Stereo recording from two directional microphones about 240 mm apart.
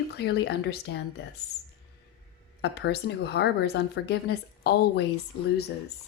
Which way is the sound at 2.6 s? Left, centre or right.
Left.